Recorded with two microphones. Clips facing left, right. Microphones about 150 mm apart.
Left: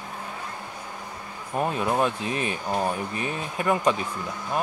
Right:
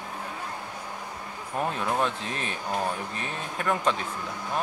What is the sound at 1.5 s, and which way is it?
Speech, 15° left (ahead or behind).